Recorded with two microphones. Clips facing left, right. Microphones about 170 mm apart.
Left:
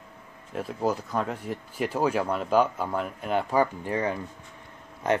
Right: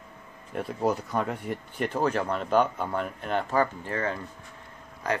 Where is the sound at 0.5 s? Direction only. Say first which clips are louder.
Even; centre (ahead or behind).